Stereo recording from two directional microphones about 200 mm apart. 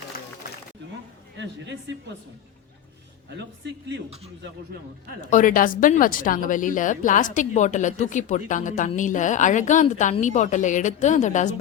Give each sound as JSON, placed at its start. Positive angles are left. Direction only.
{"t": 3.3, "sound": "speech", "side_deg": -65}
{"t": 5.3, "sound": "speech", "side_deg": 40}